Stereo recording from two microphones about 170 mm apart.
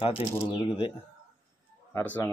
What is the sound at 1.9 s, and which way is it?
Speech, 10° left (ahead or behind).